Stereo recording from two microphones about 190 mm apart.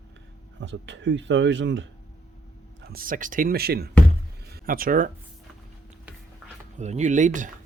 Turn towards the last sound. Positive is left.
turn(degrees=-40)  # may be behind; listen again after turning